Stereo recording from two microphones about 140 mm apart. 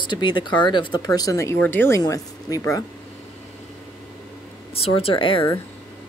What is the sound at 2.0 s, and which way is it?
Speech, 25° left (ahead or behind).